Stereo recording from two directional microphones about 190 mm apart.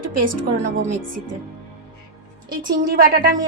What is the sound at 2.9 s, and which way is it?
Speech, 55° right (ahead or behind).